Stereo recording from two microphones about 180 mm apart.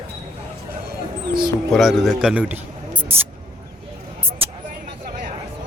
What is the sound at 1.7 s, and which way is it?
A man's voice, centre (ahead or behind).